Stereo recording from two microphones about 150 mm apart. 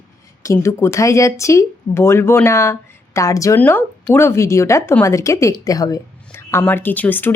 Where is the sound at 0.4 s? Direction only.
20° left (ahead or behind).